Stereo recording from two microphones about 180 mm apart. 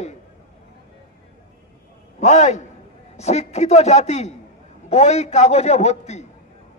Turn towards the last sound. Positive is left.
turn(degrees=40)  # may be behind; listen again after turning